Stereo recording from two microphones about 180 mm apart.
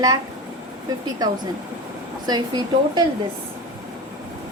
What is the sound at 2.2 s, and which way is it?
Speech, 25° right (ahead or behind).